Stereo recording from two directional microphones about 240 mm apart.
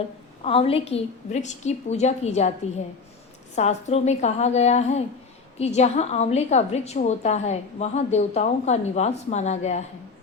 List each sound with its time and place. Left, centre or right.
0.4 s a woman's voice: left
3.5 s a woman's voice: left